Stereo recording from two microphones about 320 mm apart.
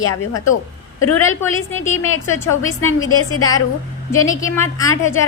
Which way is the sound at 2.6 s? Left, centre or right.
Left.